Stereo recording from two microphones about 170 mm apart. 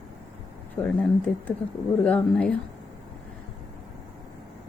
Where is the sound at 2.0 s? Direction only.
5° left (ahead or behind).